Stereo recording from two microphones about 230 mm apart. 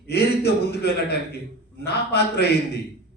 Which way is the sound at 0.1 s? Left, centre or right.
Left.